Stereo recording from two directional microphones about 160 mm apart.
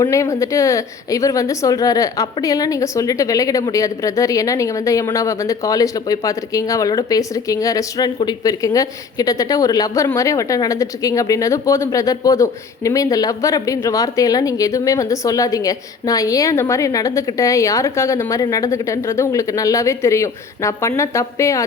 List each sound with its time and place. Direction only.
0.0 s speech: 20° left (ahead or behind)